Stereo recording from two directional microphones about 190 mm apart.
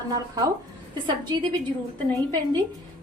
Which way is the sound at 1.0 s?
25° right (ahead or behind).